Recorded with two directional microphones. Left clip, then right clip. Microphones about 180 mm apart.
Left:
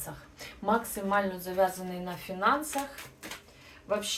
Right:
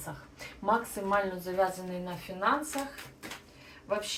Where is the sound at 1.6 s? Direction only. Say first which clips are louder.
Left 2 dB; 20° left (ahead or behind).